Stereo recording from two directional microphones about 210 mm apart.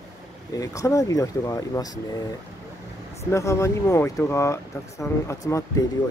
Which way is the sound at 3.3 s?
15° left (ahead or behind).